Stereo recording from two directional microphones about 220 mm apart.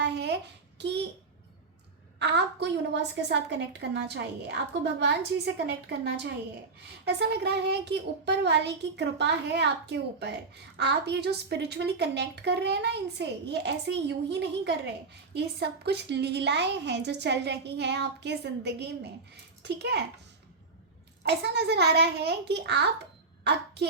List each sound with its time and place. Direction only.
0.0 s a sound: 50° right (ahead or behind)
2.1 s a woman's voice: 50° right (ahead or behind)
21.2 s a woman's voice: 50° right (ahead or behind)